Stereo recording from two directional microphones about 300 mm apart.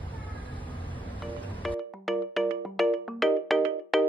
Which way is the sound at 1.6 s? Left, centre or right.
Centre.